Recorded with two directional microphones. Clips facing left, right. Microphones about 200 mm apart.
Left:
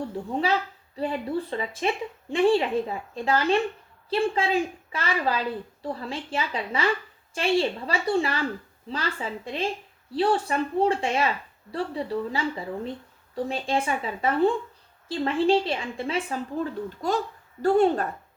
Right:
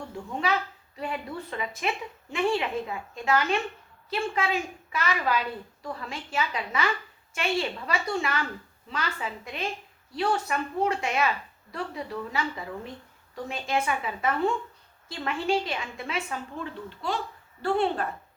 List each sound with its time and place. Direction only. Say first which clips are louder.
0.1 s a woman's voice: even; 35° left (ahead or behind)